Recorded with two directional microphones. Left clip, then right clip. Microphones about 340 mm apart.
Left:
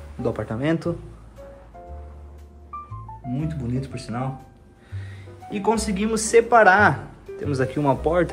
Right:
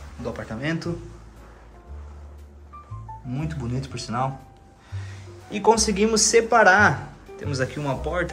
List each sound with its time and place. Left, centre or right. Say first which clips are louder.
0.2 s speech: left 5 dB; centre
3.3 s speech: left 2 dB; centre
5.5 s speech: right 4 dB; centre